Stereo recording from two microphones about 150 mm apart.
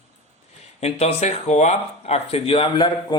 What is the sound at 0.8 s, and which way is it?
Speech, 45° left (ahead or behind).